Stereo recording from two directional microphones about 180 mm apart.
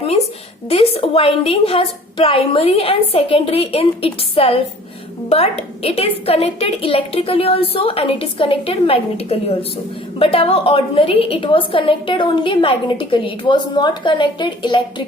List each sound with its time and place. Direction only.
0.7 s a woman's voice: 30° left (ahead or behind)